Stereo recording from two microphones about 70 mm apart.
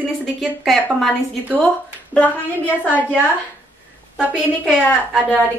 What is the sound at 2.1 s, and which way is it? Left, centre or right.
Speech, left.